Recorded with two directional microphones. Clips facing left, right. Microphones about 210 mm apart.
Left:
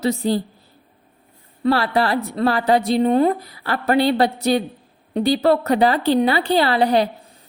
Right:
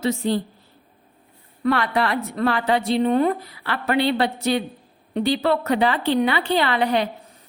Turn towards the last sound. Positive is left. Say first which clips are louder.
# left 4 dB
turn(degrees=35)  # may be behind; listen again after turning